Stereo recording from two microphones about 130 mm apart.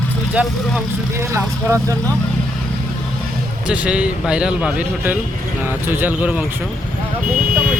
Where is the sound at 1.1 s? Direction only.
20° right (ahead or behind).